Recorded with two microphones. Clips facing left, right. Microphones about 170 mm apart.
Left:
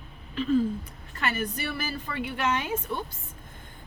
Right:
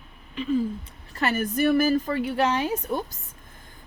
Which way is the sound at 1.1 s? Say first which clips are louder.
Right 5 dB; 40° right (ahead or behind).